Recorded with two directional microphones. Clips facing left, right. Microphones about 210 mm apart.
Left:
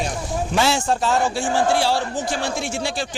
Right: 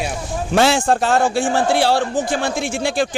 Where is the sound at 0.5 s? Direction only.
55° right (ahead or behind).